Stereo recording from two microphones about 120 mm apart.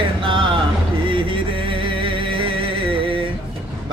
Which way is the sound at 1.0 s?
45° right (ahead or behind).